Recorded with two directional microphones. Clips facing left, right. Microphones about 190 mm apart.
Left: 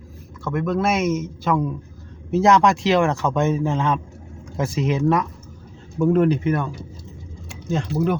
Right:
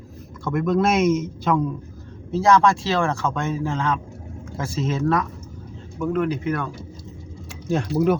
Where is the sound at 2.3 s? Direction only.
20° left (ahead or behind).